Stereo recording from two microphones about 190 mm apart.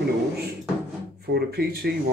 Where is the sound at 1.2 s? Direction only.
55° right (ahead or behind).